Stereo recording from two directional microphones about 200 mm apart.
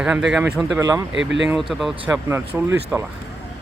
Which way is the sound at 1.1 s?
65° right (ahead or behind).